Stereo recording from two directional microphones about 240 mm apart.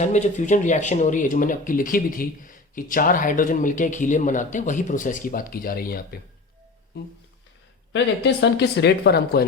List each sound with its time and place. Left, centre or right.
0.0 s speech: left